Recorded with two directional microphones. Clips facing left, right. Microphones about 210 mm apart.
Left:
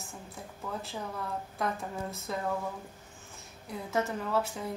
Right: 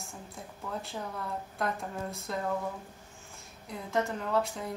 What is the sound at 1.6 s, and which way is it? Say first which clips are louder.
Speech: even; centre (ahead or behind).